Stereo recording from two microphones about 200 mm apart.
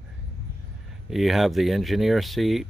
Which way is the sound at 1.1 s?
Centre (ahead or behind).